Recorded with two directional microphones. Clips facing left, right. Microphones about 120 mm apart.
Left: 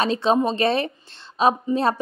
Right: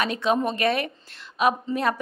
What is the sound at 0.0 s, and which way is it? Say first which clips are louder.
A woman's voice: left 4 dB; 30° left (ahead or behind).